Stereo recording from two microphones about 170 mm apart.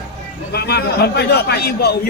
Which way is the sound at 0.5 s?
70° left (ahead or behind).